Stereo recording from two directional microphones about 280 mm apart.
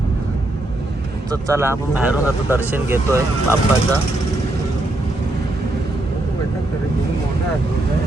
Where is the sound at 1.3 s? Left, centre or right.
Centre.